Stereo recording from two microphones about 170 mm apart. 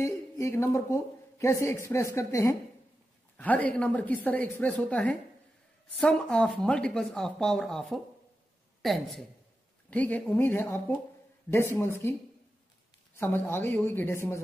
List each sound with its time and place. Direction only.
0.0 s a woman's voice: 15° left (ahead or behind)